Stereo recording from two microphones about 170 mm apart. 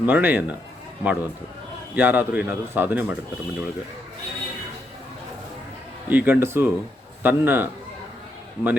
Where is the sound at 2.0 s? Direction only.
10° right (ahead or behind).